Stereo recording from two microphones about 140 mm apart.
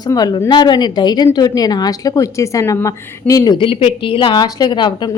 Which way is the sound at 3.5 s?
40° left (ahead or behind).